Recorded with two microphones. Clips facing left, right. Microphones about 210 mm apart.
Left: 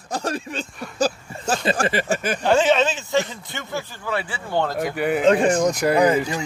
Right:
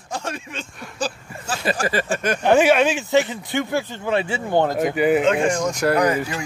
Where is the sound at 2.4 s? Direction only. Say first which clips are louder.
Right 2 dB; 10° right (ahead or behind).